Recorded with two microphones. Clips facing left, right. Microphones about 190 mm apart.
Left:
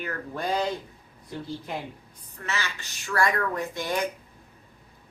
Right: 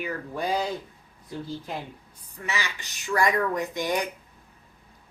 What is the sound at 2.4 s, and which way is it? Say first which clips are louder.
Speech: right 1 dB; 15° right (ahead or behind).